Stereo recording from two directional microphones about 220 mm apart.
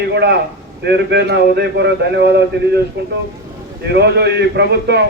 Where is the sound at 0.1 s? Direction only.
50° right (ahead or behind).